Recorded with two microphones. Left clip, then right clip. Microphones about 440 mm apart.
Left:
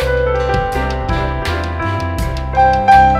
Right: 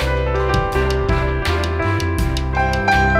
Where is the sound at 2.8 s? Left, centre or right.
Centre.